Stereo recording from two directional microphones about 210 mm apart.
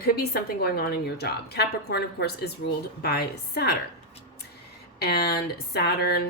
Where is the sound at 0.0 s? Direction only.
45° left (ahead or behind).